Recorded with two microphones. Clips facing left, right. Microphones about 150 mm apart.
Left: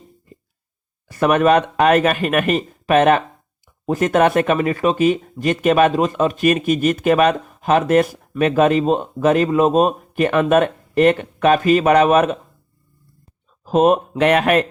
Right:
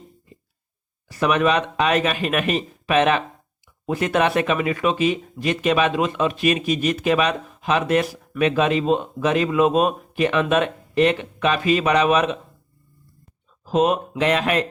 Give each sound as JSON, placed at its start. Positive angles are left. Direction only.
{"t": 1.1, "sound": "speech", "side_deg": 50}
{"t": 13.7, "sound": "speech", "side_deg": 50}